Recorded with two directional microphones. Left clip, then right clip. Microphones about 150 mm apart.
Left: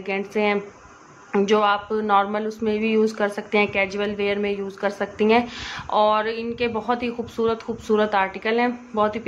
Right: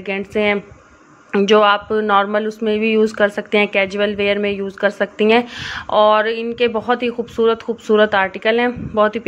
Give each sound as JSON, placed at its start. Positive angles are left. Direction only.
{"t": 0.0, "sound": "speech", "side_deg": -30}